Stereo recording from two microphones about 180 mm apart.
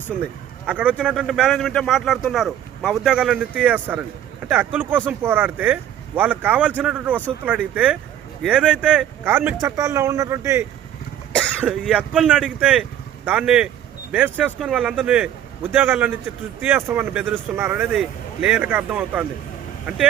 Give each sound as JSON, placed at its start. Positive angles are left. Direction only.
{"t": 0.6, "sound": "speech", "side_deg": -10}
{"t": 11.3, "sound": "speech", "side_deg": -5}